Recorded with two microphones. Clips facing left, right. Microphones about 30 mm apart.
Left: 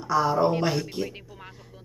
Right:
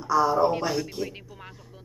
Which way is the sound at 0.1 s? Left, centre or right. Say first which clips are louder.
Right 1 dB; centre.